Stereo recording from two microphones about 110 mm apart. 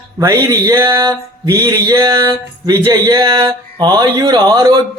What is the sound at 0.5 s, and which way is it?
Speech, 35° right (ahead or behind).